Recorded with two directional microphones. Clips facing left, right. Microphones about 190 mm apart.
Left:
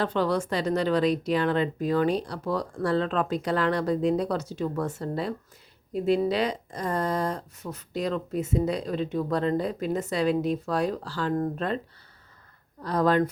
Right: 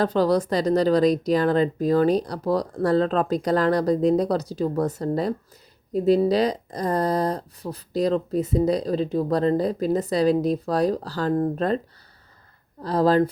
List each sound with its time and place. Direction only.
0.0 s speech: 40° right (ahead or behind)
12.8 s speech: 30° right (ahead or behind)